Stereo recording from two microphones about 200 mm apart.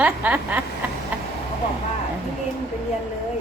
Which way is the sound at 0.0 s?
5° right (ahead or behind).